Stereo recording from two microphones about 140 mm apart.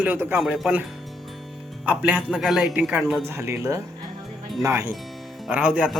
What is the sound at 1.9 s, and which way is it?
Speech, 5° right (ahead or behind).